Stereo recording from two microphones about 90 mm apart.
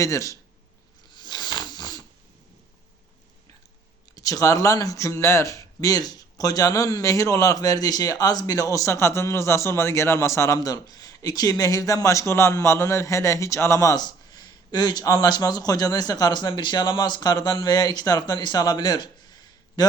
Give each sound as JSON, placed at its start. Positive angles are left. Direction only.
{"t": 0.0, "sound": "speech", "side_deg": 35}
{"t": 1.1, "sound": "a sound", "side_deg": 55}
{"t": 4.1, "sound": "speech", "side_deg": 40}